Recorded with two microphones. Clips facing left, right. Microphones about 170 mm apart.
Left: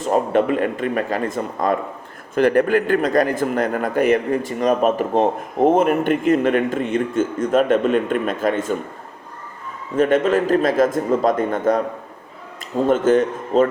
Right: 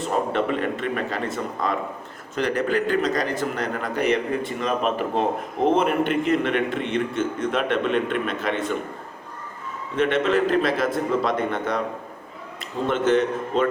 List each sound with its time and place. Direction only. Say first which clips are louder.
0.0 s a man's voice: left 6 dB; 45° left (ahead or behind)
10.0 s a man's voice: left 4 dB; 45° left (ahead or behind)
12.9 s a man's voice: left 4 dB; 45° left (ahead or behind)